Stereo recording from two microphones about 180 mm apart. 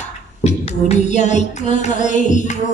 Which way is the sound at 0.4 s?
35° left (ahead or behind).